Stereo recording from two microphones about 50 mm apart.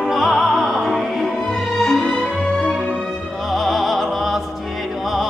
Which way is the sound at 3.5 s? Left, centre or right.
Centre.